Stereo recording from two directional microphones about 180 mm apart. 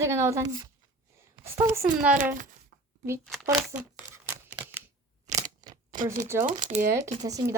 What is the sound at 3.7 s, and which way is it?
Crumpling, 15° right (ahead or behind).